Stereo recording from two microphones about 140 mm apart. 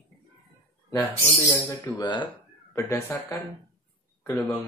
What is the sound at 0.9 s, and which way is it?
Speech, 20° left (ahead or behind).